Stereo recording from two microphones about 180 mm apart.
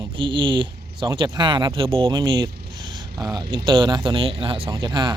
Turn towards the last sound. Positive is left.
turn(degrees=-25)  # may be behind; listen again after turning